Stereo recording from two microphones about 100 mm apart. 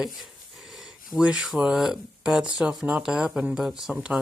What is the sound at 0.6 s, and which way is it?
Speech, centre (ahead or behind).